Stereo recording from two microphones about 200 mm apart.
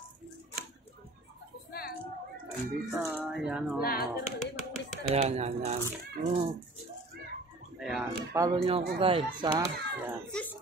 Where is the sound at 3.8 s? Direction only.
50° left (ahead or behind).